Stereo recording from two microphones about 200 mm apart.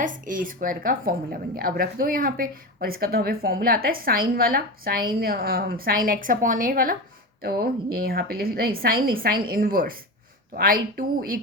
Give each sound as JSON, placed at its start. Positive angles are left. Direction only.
{"t": 0.0, "sound": "a woman's voice", "side_deg": -40}